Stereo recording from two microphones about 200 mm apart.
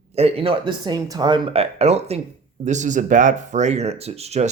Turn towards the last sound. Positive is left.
turn(degrees=-30)  # may be behind; listen again after turning